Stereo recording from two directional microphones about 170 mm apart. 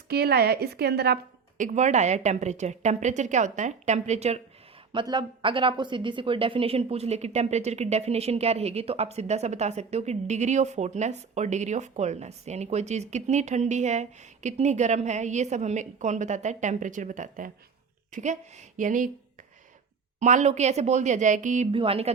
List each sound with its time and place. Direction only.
0.1 s a woman's voice: 70° right (ahead or behind)
1.6 s a woman's voice: 45° right (ahead or behind)
4.9 s a woman's voice: 30° right (ahead or behind); by 19.1 s 50° right (ahead or behind)
20.1 s a woman's voice: 45° right (ahead or behind)
21.7 s a woman's voice: 35° right (ahead or behind)